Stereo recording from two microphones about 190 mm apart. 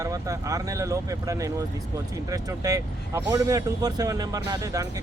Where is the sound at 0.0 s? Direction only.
15° right (ahead or behind).